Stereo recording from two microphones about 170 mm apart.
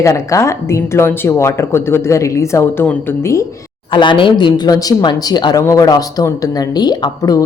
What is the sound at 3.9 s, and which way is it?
A woman's voice, 30° left (ahead or behind).